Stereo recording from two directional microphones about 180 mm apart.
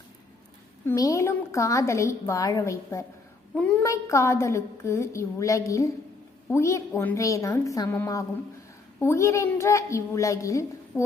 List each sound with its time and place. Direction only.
0.9 s a woman's voice: 20° left (ahead or behind)